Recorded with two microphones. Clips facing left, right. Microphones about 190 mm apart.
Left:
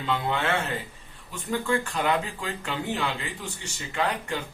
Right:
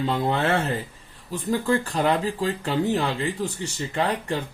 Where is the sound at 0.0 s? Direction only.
35° right (ahead or behind).